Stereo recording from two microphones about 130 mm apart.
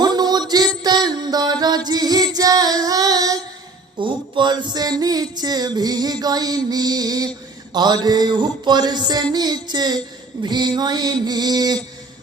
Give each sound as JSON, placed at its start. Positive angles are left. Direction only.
{"t": 0.0, "sound": "music", "side_deg": -30}